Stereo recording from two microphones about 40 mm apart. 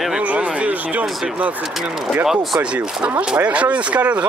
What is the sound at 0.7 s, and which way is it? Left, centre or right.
Speech, right.